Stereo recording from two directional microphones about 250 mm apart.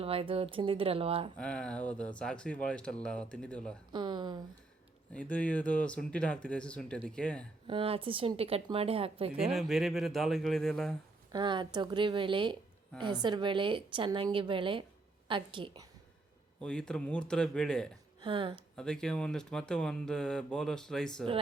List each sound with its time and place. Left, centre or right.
0.0 s speech: right
1.4 s speech: centre
3.9 s speech: centre
5.1 s speech: centre
7.7 s speech: right
9.4 s speech: centre
11.3 s speech: centre
16.6 s speech: centre
18.2 s speech: centre
18.8 s speech: centre